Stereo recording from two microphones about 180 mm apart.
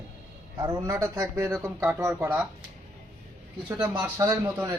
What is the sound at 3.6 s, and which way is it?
A man's voice, 10° right (ahead or behind).